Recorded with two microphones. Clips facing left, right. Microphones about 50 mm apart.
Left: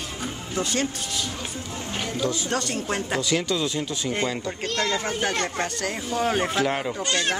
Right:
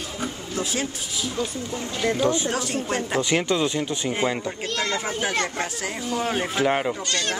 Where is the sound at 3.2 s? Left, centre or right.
Right.